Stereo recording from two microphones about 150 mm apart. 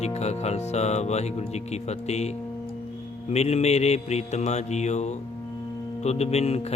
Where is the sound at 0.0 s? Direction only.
45° left (ahead or behind).